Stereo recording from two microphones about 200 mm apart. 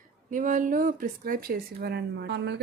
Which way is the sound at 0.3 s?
40° right (ahead or behind).